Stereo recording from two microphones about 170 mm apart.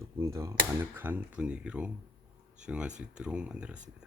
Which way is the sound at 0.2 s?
15° right (ahead or behind).